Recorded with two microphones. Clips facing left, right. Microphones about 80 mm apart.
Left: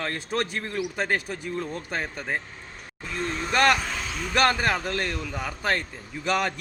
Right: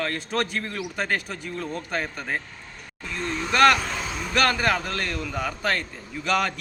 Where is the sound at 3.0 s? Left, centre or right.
Centre.